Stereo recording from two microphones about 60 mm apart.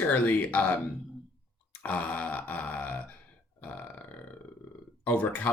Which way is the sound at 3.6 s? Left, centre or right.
Left.